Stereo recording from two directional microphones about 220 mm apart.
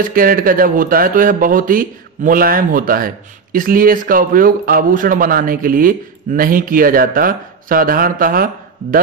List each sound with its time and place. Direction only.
0.1 s speech: 40° right (ahead or behind)